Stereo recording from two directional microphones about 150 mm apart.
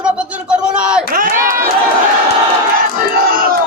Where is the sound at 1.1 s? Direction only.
70° right (ahead or behind).